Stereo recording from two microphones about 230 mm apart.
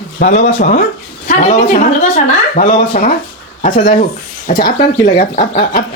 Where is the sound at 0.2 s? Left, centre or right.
Left.